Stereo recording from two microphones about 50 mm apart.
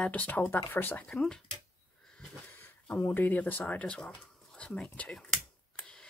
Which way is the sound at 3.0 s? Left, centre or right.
Left.